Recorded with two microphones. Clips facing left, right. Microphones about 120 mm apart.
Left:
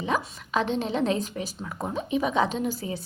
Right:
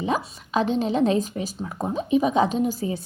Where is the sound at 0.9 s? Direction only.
30° right (ahead or behind).